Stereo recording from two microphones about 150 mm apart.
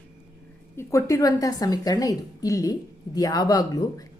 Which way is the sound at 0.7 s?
20° left (ahead or behind).